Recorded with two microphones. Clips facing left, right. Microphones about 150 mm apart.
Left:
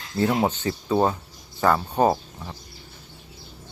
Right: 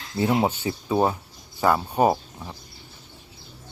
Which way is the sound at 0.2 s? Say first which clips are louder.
Even; 10° right (ahead or behind).